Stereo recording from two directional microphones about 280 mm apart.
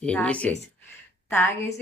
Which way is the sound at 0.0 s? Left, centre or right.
Centre.